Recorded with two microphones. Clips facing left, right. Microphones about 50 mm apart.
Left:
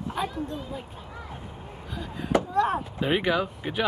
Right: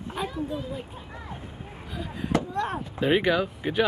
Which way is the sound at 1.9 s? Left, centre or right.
Centre.